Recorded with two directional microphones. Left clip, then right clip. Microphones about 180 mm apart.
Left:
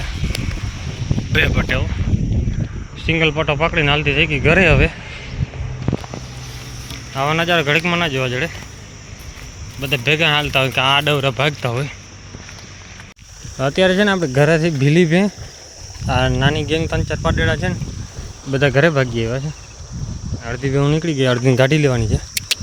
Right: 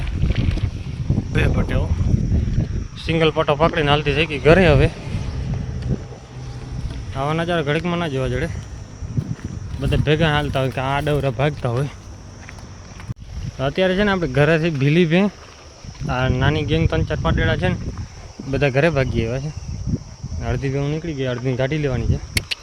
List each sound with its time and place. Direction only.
0.0 s a sound: centre (ahead or behind)
1.3 s speech: centre (ahead or behind)
3.0 s speech: 40° right (ahead or behind)
4.4 s speech: 20° right (ahead or behind)
7.2 s speech: 5° right (ahead or behind)
9.8 s speech: 15° right (ahead or behind)
13.6 s speech: 15° left (ahead or behind)
20.4 s speech: 10° left (ahead or behind)
20.7 s speech: 35° left (ahead or behind)